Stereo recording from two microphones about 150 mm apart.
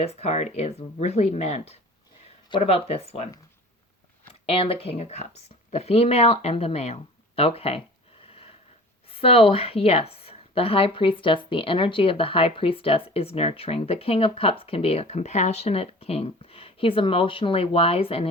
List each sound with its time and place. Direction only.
0.0 s speech: 45° left (ahead or behind)
4.4 s a woman's voice: 40° left (ahead or behind)
9.0 s a woman's voice: 40° left (ahead or behind)